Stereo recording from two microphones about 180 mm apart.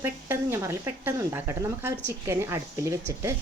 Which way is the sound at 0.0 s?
15° right (ahead or behind).